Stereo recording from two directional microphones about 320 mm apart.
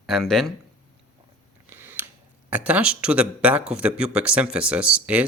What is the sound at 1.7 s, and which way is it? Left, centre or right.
Scissors, centre.